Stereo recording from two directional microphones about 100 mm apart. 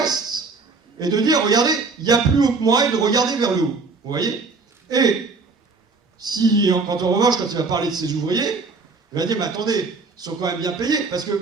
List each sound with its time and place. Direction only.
0.0 s a sound: 45° right (ahead or behind)
0.9 s a man's voice: 45° right (ahead or behind)
6.1 s a man's voice: 40° right (ahead or behind)